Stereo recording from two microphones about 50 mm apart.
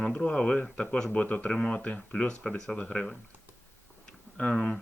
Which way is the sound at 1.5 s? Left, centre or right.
Centre.